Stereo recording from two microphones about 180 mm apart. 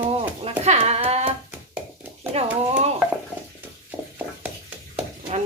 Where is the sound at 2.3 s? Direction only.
35° right (ahead or behind).